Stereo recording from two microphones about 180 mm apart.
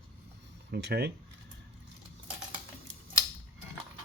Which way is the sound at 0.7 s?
65° right (ahead or behind).